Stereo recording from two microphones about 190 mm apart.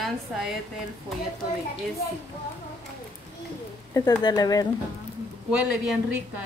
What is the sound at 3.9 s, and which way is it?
Speech, 20° left (ahead or behind).